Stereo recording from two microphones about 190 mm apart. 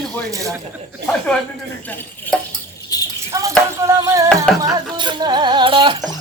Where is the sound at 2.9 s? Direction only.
20° left (ahead or behind).